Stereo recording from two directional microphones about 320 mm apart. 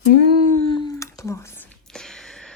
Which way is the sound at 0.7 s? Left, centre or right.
Centre.